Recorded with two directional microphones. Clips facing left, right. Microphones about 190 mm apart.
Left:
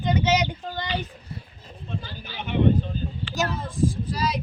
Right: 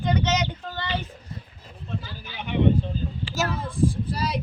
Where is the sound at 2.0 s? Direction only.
35° left (ahead or behind).